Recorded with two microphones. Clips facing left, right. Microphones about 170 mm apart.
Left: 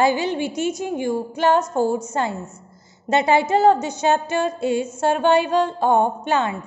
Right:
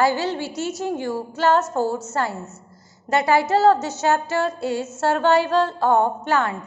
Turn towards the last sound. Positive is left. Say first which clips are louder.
# left 1 dB
turn(degrees=20)  # may be behind; listen again after turning